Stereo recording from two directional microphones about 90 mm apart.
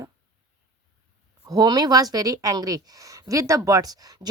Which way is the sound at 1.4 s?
45° right (ahead or behind).